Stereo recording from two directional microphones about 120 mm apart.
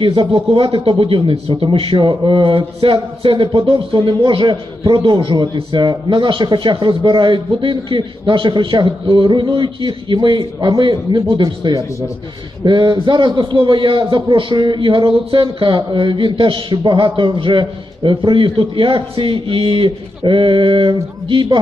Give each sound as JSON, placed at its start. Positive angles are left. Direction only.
{"t": 0.0, "sound": "a man's voice", "side_deg": -45}